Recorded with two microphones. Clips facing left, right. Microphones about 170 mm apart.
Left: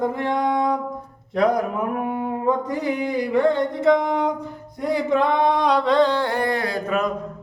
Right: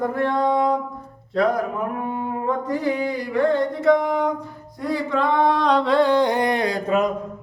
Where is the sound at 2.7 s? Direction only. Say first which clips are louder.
Right 1 dB; 20° left (ahead or behind).